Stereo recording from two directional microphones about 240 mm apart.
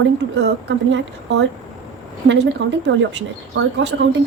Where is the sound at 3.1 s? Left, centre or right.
Right.